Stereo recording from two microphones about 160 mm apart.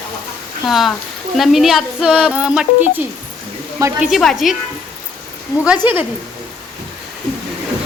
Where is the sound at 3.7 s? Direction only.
15° right (ahead or behind).